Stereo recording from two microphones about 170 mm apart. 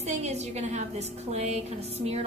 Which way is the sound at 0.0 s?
40° right (ahead or behind).